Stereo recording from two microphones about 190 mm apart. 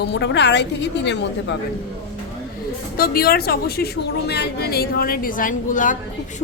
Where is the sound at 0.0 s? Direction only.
65° left (ahead or behind).